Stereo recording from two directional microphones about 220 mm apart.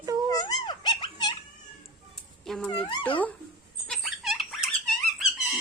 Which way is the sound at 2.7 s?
25° left (ahead or behind).